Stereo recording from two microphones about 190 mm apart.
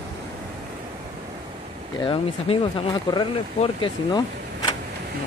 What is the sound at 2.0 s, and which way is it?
Speech, 25° left (ahead or behind).